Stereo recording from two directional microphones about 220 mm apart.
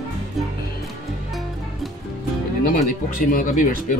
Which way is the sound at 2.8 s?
40° left (ahead or behind).